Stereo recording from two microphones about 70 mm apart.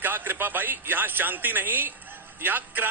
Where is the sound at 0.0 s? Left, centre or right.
Right.